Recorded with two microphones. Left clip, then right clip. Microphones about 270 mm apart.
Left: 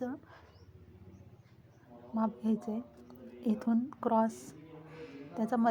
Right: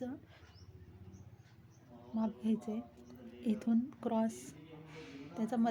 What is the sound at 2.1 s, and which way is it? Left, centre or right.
A woman's voice, centre.